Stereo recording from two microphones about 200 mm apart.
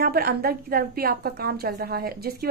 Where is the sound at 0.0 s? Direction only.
50° right (ahead or behind).